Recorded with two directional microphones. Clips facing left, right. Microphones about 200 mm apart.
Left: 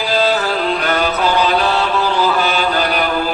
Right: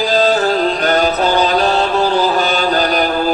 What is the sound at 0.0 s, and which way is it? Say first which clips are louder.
Music: right 3 dB; 40° right (ahead or behind).